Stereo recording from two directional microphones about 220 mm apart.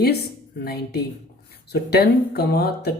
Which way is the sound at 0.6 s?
45° left (ahead or behind).